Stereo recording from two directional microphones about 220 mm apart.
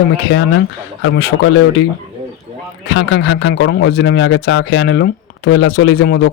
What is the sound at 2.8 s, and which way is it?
A man's voice, 50° left (ahead or behind).